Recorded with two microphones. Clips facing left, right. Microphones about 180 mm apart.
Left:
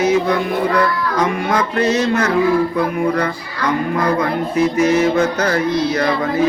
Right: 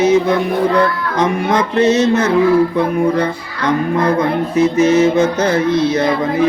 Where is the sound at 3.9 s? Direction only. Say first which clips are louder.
Right 3 dB; 25° right (ahead or behind).